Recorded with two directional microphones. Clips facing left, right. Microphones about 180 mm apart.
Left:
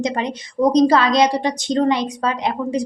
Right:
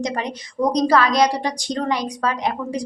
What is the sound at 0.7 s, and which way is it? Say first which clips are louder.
A woman's voice: left 3 dB; 25° left (ahead or behind).